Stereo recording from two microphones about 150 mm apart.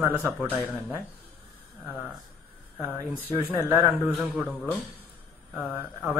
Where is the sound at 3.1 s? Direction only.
10° right (ahead or behind).